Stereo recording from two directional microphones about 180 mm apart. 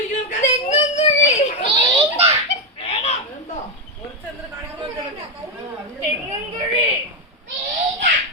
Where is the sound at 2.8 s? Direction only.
30° left (ahead or behind).